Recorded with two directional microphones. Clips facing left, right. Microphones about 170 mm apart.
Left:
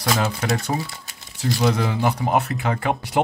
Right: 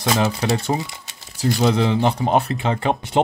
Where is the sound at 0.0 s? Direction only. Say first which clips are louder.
Right 3 dB; 25° right (ahead or behind).